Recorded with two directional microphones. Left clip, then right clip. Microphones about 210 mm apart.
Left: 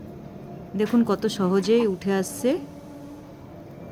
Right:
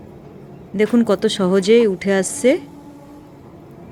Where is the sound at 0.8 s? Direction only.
15° right (ahead or behind).